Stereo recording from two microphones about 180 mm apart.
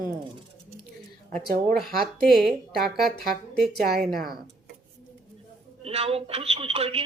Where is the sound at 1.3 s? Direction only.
Centre (ahead or behind).